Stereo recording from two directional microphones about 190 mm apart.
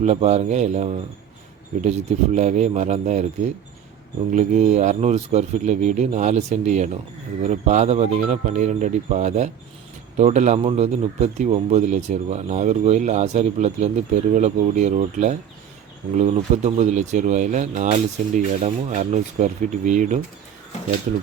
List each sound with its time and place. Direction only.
0.0 s a man's voice: 35° right (ahead or behind)
4.3 s a man's voice: 40° right (ahead or behind)